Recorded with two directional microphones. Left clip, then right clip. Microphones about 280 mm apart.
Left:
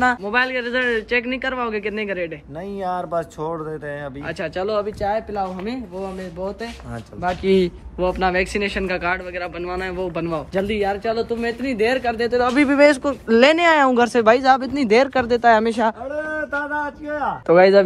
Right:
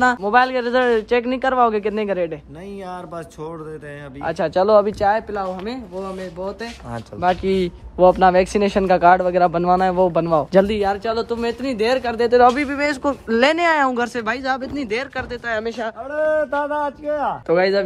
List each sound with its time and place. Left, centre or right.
0.0 s a man's voice: centre
2.8 s speech: centre
4.2 s a man's voice: centre
10.5 s a man's voice: right
12.2 s speech: right
12.5 s speech: centre
16.3 s speech: right
17.5 s speech: centre